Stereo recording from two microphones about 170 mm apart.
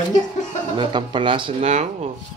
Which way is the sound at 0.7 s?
30° right (ahead or behind).